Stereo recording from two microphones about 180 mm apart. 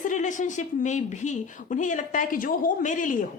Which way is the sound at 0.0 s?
45° left (ahead or behind).